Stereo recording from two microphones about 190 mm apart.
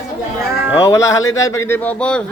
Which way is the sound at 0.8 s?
15° left (ahead or behind).